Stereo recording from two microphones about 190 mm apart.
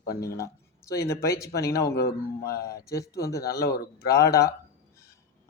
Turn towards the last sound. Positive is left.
turn(degrees=15)  # may be behind; listen again after turning